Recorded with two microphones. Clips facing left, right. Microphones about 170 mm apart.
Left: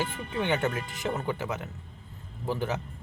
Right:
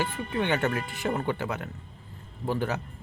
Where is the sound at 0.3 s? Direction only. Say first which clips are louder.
Right 1 dB; 10° left (ahead or behind).